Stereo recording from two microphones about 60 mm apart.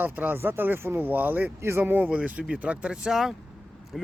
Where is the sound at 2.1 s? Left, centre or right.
Right.